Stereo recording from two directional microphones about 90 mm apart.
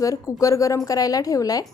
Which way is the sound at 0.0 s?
40° left (ahead or behind).